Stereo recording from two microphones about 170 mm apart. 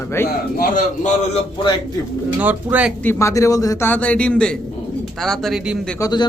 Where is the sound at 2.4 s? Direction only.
10° right (ahead or behind).